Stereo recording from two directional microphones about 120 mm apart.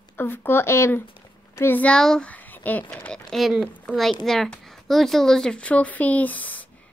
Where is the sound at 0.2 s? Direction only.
15° left (ahead or behind).